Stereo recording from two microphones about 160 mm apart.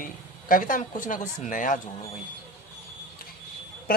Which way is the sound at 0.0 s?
60° left (ahead or behind).